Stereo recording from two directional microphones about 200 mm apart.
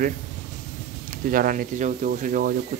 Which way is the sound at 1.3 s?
45° right (ahead or behind).